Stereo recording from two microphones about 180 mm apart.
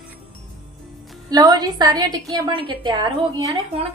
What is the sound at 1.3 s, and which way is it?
A woman's voice, 20° right (ahead or behind).